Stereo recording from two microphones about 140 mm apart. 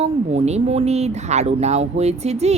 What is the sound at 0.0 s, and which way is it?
Speech, 50° right (ahead or behind).